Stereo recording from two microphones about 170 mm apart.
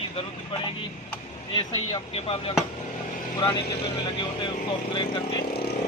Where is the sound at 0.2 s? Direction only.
30° left (ahead or behind).